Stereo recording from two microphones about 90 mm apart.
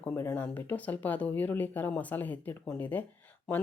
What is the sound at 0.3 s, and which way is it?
Speech, 20° left (ahead or behind).